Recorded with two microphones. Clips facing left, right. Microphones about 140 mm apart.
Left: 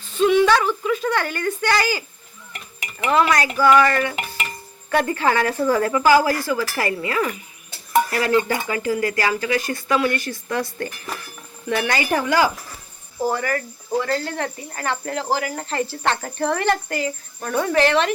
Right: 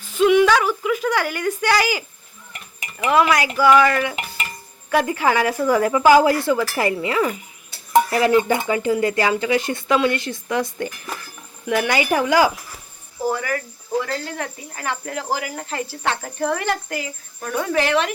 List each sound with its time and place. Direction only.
0.0 s speech: 10° right (ahead or behind)
3.1 s speech: 10° right (ahead or behind)